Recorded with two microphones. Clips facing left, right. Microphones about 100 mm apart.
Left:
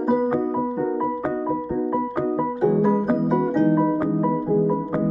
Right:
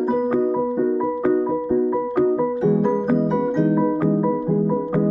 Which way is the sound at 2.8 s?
5° left (ahead or behind).